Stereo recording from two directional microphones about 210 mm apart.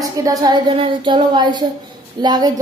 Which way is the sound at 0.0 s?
15° right (ahead or behind).